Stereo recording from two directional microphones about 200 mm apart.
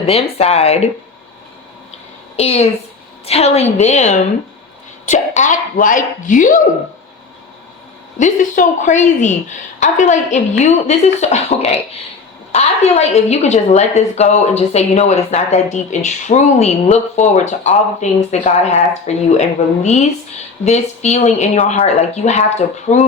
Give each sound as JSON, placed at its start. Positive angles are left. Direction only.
{"t": 0.0, "sound": "a woman's voice", "side_deg": 30}
{"t": 2.3, "sound": "a woman's voice", "side_deg": 30}
{"t": 8.2, "sound": "a woman's voice", "side_deg": 40}